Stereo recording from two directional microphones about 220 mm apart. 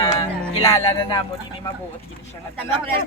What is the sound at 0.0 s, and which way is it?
Music, 15° left (ahead or behind).